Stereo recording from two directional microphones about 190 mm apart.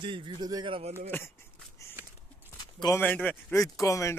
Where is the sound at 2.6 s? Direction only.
20° left (ahead or behind).